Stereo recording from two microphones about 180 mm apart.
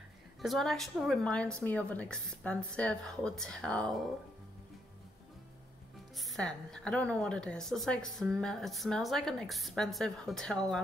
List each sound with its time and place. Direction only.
0.4 s a woman's voice: centre (ahead or behind)
6.1 s a woman's voice: centre (ahead or behind)